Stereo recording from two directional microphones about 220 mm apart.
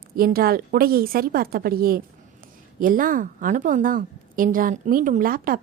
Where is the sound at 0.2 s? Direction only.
40° right (ahead or behind).